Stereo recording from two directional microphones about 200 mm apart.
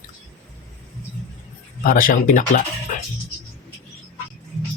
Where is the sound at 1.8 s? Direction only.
45° left (ahead or behind).